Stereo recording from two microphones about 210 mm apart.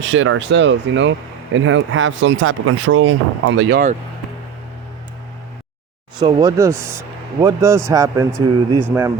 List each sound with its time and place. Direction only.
0.0 s speech: 65° right (ahead or behind)
1.5 s speech: 70° right (ahead or behind)
6.1 s speech: 20° right (ahead or behind)